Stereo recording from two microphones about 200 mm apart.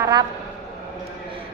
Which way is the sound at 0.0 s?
20° right (ahead or behind).